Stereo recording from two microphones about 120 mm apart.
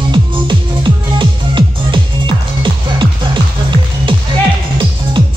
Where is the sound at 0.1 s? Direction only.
40° right (ahead or behind).